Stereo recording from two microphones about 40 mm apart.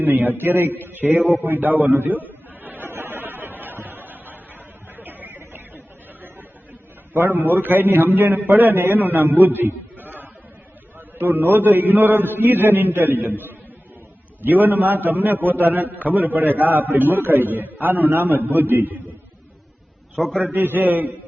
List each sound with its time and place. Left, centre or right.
0.0 s a man's voice: right
0.4 s a man's voice: right
2.9 s a sound: right
4.9 s chatter: right
5.4 s a sound: right
7.1 s a man's voice: right
9.4 s a sound: right
10.9 s a man's voice: right
20.4 s a man's voice: right